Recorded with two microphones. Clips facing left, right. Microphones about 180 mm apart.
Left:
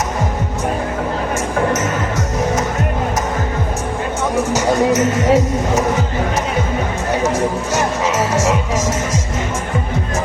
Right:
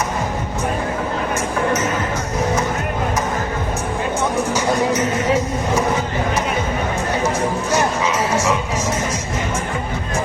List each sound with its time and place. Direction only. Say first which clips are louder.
4.9 s speech: left 4 dB; 40° left (ahead or behind)